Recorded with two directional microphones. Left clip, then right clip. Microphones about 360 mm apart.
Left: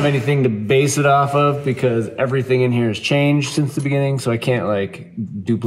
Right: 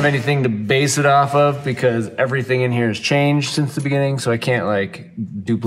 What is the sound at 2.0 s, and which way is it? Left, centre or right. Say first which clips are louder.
Speech: even; centre.